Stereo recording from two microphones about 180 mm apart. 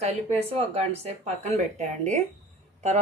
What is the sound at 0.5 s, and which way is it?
A woman's voice, 35° right (ahead or behind).